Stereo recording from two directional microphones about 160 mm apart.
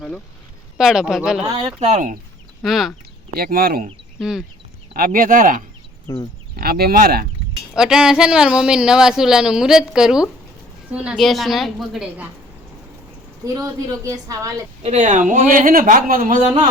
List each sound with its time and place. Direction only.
0.8 s a woman's voice: centre (ahead or behind)
1.5 s speech: 35° right (ahead or behind)
2.6 s a woman's voice: centre (ahead or behind)
3.3 s speech: 70° right (ahead or behind)
4.2 s a woman's voice: 5° right (ahead or behind)
4.9 s speech: 60° right (ahead or behind)
6.6 s speech: 70° right (ahead or behind)
7.8 s a woman's voice: 5° right (ahead or behind)
13.4 s a woman's voice: 20° right (ahead or behind)
14.8 s speech: 50° right (ahead or behind)
16.4 s a woman's voice: 25° right (ahead or behind)